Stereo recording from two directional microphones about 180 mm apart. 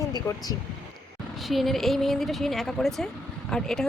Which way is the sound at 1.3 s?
Centre (ahead or behind).